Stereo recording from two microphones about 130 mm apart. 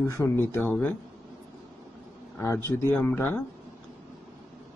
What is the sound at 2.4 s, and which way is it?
Speech, 20° left (ahead or behind).